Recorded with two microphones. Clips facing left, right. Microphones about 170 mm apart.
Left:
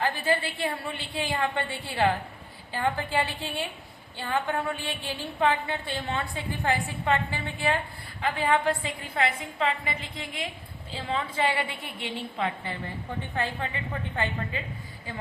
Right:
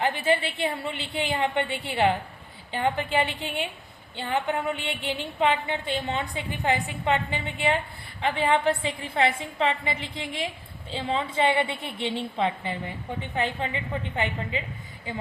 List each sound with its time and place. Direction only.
0.0 s a woman's voice: 20° right (ahead or behind)